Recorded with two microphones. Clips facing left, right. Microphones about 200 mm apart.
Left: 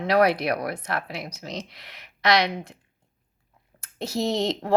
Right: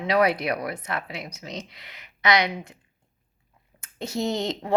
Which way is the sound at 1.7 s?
75° left (ahead or behind).